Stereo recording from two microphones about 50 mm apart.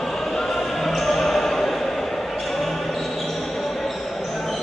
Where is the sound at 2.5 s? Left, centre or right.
Centre.